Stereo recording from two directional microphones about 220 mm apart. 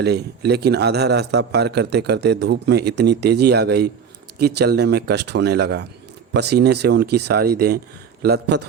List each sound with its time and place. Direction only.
0.0 s a man's voice: 50° right (ahead or behind)